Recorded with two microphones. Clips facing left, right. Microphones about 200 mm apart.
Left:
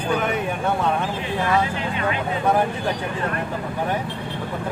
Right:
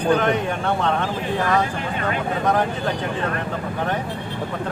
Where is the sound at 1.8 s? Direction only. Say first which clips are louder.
Even; 50° right (ahead or behind).